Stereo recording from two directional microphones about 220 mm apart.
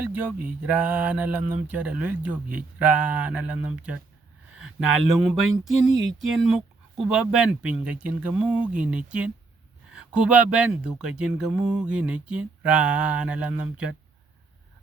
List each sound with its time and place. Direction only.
0.0 s speech: 5° right (ahead or behind)
5.2 s speech: centre (ahead or behind)